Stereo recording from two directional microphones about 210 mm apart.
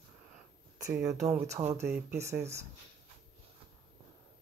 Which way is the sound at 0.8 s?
10° right (ahead or behind).